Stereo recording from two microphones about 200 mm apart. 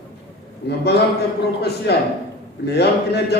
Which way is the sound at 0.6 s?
55° left (ahead or behind).